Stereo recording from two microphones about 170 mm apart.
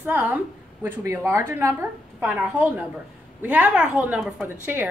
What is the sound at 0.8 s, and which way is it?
A woman's voice, 15° right (ahead or behind).